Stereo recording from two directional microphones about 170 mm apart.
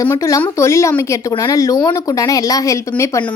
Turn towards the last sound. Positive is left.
turn(degrees=15)  # may be behind; listen again after turning